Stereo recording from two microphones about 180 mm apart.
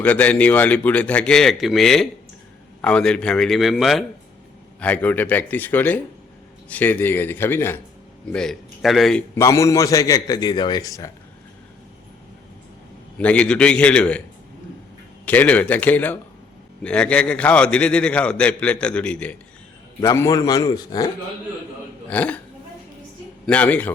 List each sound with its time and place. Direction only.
0.0 s a man's voice: 10° left (ahead or behind)
9.3 s a man's voice: 15° left (ahead or behind)
13.1 s a man's voice: 5° left (ahead or behind)
15.3 s a man's voice: 10° left (ahead or behind)
20.0 s a man's voice: 15° left (ahead or behind)
22.1 s a man's voice: 10° left (ahead or behind)
23.5 s a man's voice: 10° left (ahead or behind)